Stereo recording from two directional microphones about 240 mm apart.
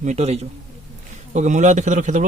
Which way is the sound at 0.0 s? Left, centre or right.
Right.